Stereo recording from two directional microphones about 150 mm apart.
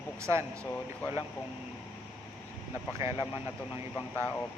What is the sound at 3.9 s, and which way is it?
Speech, 15° left (ahead or behind).